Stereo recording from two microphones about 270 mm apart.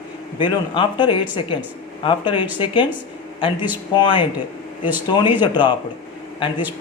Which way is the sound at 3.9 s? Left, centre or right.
Centre.